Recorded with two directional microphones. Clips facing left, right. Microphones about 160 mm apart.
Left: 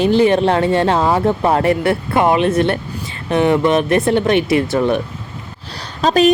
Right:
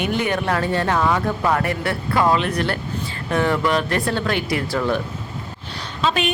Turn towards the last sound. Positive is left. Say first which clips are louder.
# left 8 dB
turn(degrees=40)  # may be behind; listen again after turning